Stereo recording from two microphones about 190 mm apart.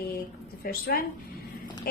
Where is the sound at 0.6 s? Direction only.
50° left (ahead or behind).